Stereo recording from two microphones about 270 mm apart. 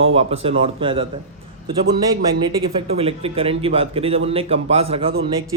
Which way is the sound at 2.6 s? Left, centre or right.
Right.